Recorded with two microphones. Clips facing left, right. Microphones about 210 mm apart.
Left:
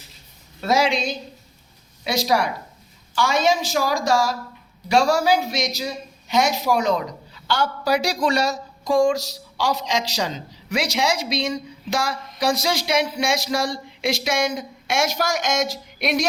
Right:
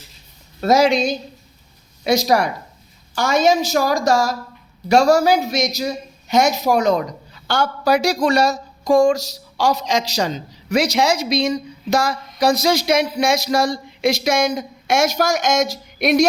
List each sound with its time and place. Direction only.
0.6 s speech: 40° right (ahead or behind)